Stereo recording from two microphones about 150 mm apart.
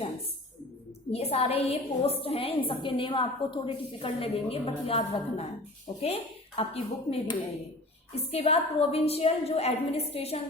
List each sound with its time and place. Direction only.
1.1 s a woman's voice: 40° left (ahead or behind)
6.6 s a woman's voice: 40° left (ahead or behind)